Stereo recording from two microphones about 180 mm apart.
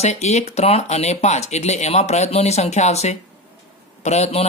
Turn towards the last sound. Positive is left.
turn(degrees=40)  # may be behind; listen again after turning